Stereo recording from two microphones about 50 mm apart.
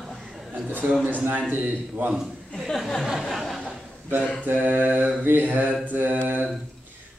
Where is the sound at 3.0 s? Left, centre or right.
Centre.